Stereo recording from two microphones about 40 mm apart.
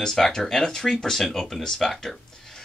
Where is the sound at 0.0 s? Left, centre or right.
Centre.